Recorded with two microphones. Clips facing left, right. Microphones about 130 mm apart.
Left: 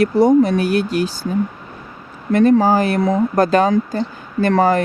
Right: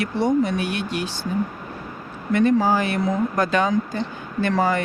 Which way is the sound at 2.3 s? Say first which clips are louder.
Left 5 dB; 45° left (ahead or behind).